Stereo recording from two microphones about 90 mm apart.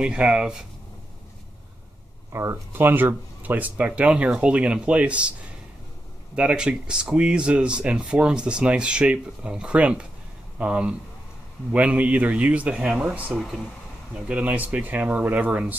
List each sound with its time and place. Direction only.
0.0 s speech: 10° right (ahead or behind)
2.3 s speech: 30° right (ahead or behind); by 5.3 s 15° right (ahead or behind)
6.3 s speech: 10° right (ahead or behind)